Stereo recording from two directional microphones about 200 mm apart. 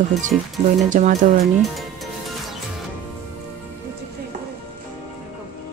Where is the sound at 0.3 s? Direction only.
Centre (ahead or behind).